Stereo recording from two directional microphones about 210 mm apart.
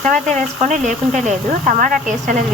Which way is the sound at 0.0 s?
35° right (ahead or behind).